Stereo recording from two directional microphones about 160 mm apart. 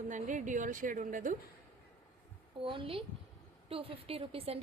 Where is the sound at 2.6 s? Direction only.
35° right (ahead or behind).